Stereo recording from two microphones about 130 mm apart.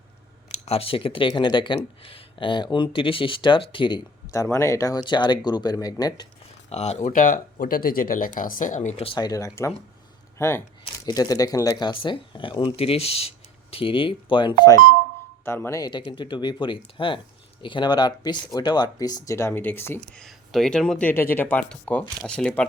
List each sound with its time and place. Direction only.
0.6 s speech: 50° left (ahead or behind)
4.4 s speech: 20° left (ahead or behind)
6.7 s speech: 55° left (ahead or behind)
9.0 s speech: 30° left (ahead or behind)
15.4 s speech: 20° left (ahead or behind)
15.8 s speech: 35° left (ahead or behind); by 20.0 s 15° left (ahead or behind)
20.1 s speech: centre (ahead or behind)
21.1 s speech: 15° left (ahead or behind)